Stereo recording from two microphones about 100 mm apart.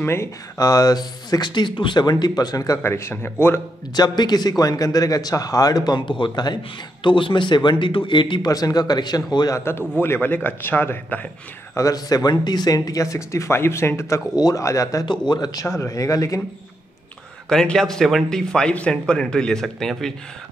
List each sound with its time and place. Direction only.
0.0 s a man's voice: 25° left (ahead or behind)
0.6 s speech: 40° left (ahead or behind)
2.8 s a man's voice: 25° left (ahead or behind)
3.9 s a man's voice: 45° left (ahead or behind)
8.5 s speech: 40° left (ahead or behind)
9.6 s a man's voice: 25° left (ahead or behind)
11.7 s speech: 35° left (ahead or behind)
15.0 s a man's voice: 45° left (ahead or behind)
17.5 s speech: 5° left (ahead or behind)